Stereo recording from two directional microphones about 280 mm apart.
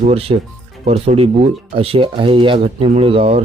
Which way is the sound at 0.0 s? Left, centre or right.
Right.